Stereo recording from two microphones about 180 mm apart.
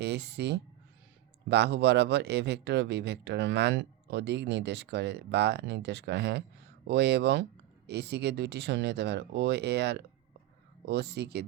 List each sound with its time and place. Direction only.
0.0 s a man's voice: 70° right (ahead or behind)